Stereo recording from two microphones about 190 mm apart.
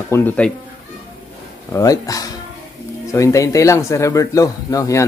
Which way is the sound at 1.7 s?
20° left (ahead or behind).